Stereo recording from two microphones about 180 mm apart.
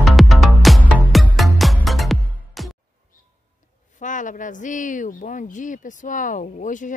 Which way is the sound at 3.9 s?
45° left (ahead or behind).